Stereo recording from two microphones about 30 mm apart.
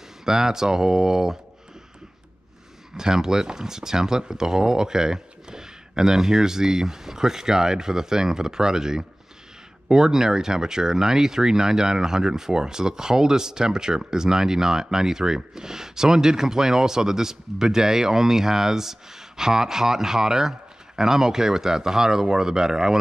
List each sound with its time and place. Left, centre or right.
0.2 s speech: centre
3.0 s speech: centre